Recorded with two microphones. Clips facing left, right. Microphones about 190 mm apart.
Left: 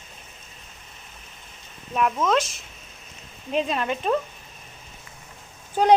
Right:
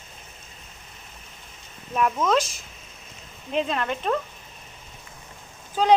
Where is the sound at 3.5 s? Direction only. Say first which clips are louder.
Left 1 dB; 15° left (ahead or behind).